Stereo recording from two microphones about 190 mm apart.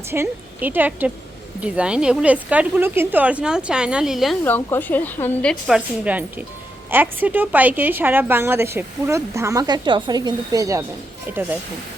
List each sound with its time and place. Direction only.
0.1 s a woman's voice: 10° right (ahead or behind)
4.4 s a woman's voice: 10° left (ahead or behind); by 11.4 s 10° right (ahead or behind)